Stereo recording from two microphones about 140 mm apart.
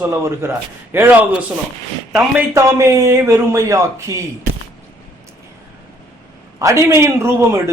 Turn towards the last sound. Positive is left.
turn(degrees=-20)  # may be behind; listen again after turning